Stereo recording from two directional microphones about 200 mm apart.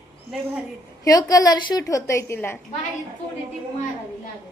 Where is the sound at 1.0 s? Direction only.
20° left (ahead or behind).